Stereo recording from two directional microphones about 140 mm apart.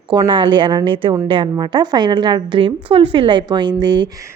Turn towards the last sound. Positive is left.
turn(degrees=-30)  # may be behind; listen again after turning